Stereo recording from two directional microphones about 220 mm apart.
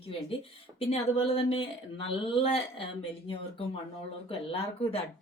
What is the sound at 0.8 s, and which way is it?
Speech, 25° left (ahead or behind).